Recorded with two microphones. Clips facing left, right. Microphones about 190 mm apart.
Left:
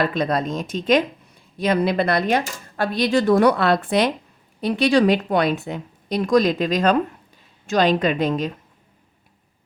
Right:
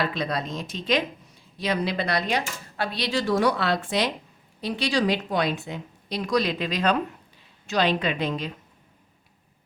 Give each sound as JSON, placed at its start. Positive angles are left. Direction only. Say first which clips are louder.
{"t": 0.0, "sound": "speech", "louder": "left 6 dB", "side_deg": 50}